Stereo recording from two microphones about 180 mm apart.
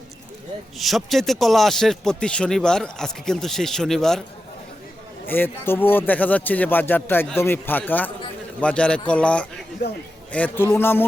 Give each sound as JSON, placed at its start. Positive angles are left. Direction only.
{"t": 0.8, "sound": "speech", "side_deg": 0}
{"t": 5.2, "sound": "speech", "side_deg": 10}
{"t": 9.8, "sound": "a man's voice", "side_deg": 65}
{"t": 10.3, "sound": "speech", "side_deg": 10}